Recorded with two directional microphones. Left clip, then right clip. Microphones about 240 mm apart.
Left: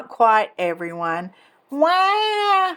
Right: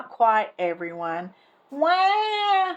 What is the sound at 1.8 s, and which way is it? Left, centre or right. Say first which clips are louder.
Cat: left 3 dB; left.